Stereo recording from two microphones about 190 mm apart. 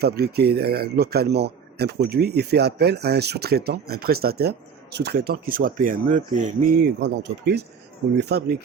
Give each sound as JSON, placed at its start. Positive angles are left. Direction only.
{"t": 0.0, "sound": "speech", "side_deg": -55}
{"t": 6.7, "sound": "speech", "side_deg": -60}